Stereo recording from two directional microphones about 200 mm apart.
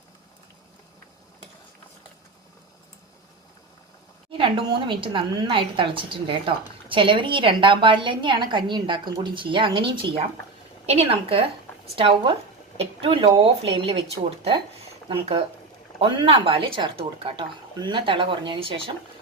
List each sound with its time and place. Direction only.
4.3 s a sound: 25° right (ahead or behind)
4.9 s a woman's voice: 25° right (ahead or behind)
15.1 s a woman's voice: 30° right (ahead or behind)